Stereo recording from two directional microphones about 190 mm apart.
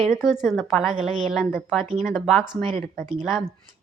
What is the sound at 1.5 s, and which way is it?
Speech, 15° left (ahead or behind).